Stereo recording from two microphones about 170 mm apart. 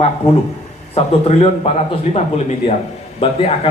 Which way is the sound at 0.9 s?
35° left (ahead or behind).